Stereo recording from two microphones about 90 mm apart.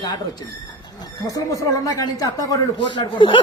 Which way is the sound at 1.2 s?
40° left (ahead or behind).